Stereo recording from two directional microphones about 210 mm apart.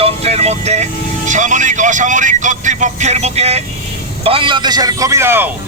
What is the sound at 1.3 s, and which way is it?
A man's voice, 35° right (ahead or behind).